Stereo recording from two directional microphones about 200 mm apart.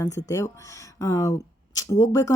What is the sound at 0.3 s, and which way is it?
Speech, 15° left (ahead or behind).